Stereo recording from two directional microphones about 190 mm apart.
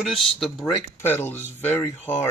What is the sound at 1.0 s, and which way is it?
Speech, 10° left (ahead or behind).